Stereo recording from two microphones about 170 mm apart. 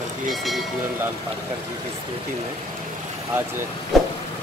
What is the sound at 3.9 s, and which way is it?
Vehicle, centre (ahead or behind).